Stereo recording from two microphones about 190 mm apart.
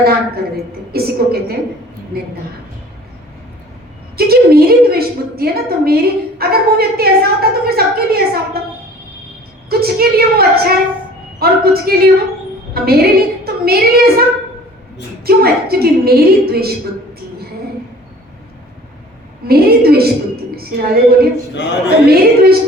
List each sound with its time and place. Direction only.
0.0 s a woman's voice: 55° right (ahead or behind)
4.2 s a woman's voice: 55° right (ahead or behind)
9.6 s a woman's voice: 55° right (ahead or behind)
19.5 s a woman's voice: 55° right (ahead or behind)
21.5 s a man's voice: 65° left (ahead or behind)
22.1 s a woman's voice: 55° right (ahead or behind)